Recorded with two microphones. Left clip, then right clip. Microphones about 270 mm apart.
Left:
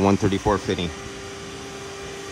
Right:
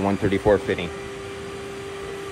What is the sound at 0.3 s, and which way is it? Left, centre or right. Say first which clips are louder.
Speech: right 3 dB; centre.